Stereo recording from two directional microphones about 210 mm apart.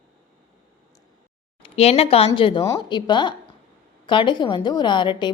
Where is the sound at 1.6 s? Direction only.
30° left (ahead or behind).